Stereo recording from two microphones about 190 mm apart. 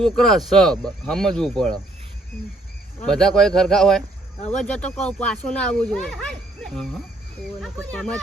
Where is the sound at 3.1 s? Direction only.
5° left (ahead or behind).